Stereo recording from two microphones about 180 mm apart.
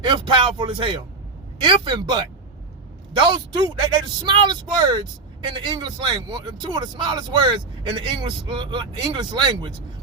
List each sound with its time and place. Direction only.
0.0 s speech: 25° right (ahead or behind)